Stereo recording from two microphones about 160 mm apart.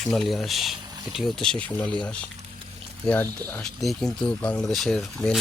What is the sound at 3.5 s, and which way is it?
Speech, centre (ahead or behind).